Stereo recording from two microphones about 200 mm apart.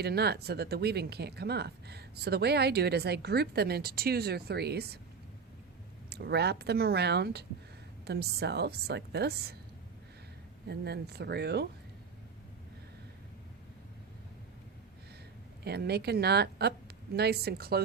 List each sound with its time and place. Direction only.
0.0 s speech: 55° right (ahead or behind)
6.1 s a woman's voice: 55° right (ahead or behind)
10.7 s a woman's voice: 55° right (ahead or behind)
15.6 s speech: 55° right (ahead or behind)